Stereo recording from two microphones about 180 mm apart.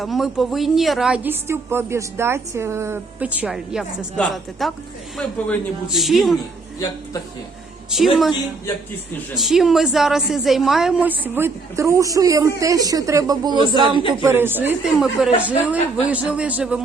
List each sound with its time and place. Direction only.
0.0 s a woman's voice: centre (ahead or behind)
7.9 s a woman's voice: centre (ahead or behind); by 14.0 s 25° right (ahead or behind)
14.3 s a woman's voice: 10° right (ahead or behind)